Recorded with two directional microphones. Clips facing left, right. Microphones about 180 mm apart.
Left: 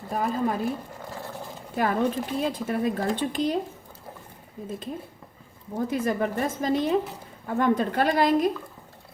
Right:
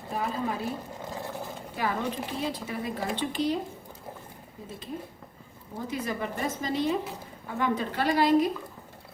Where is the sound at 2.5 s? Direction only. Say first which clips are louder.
Left 7 dB; 50° left (ahead or behind).